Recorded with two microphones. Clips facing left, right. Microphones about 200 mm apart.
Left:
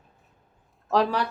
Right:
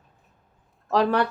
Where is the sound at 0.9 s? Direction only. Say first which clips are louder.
Right 1 dB; centre (ahead or behind).